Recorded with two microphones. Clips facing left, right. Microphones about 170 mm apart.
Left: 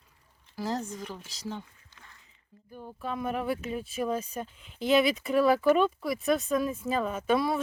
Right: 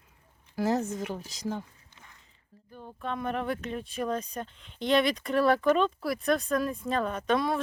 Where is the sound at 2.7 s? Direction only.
5° left (ahead or behind).